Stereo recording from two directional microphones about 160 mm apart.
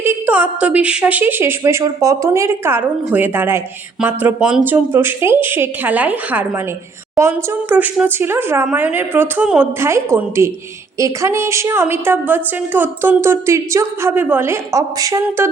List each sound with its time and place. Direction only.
0.0 s a woman's voice: 10° right (ahead or behind)